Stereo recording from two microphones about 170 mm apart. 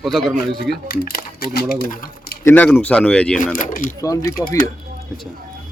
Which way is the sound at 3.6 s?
50° left (ahead or behind).